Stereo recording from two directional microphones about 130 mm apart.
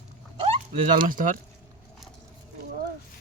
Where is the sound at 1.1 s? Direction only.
90° right.